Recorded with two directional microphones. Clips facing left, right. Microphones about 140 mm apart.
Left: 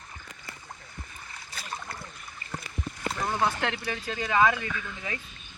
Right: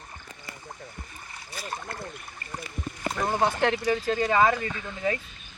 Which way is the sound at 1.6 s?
45° right (ahead or behind).